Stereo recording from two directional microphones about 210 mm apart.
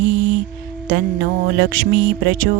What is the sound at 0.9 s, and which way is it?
Music, 45° right (ahead or behind).